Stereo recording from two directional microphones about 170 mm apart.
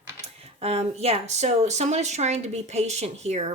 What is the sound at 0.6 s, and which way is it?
Speech, 40° right (ahead or behind).